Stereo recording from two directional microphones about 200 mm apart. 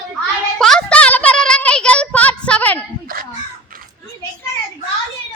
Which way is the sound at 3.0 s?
45° right (ahead or behind).